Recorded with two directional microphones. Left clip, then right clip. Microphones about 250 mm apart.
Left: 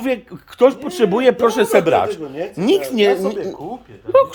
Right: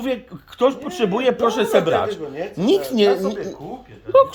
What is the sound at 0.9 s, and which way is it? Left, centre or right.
A man's voice, left.